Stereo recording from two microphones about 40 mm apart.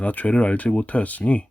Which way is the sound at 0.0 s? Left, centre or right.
Left.